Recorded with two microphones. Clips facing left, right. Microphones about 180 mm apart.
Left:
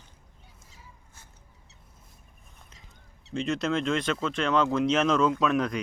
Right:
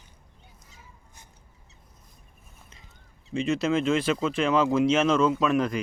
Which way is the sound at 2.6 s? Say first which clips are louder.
Right 1 dB; centre (ahead or behind).